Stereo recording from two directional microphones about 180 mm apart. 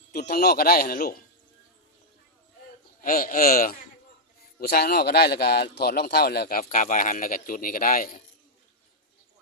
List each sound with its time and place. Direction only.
0.1 s speech: 55° left (ahead or behind)
3.0 s a man's voice: 50° left (ahead or behind)
6.6 s a man's voice: 45° left (ahead or behind)